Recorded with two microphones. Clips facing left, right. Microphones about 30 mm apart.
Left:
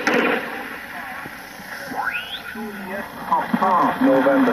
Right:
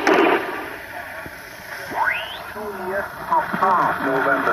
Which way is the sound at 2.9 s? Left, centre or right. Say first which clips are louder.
Right 1 dB; centre.